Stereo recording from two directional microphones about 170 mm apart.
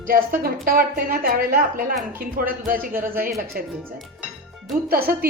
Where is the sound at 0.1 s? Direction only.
60° right (ahead or behind).